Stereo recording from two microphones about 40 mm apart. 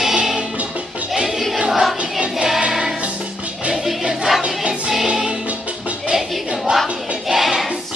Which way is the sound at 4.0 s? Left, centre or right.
Centre.